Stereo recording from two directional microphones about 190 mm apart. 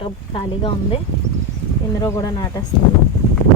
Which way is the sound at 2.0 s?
20° left (ahead or behind).